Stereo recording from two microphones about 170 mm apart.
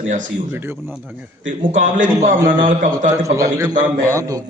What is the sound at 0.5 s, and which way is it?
Speech, 15° right (ahead or behind).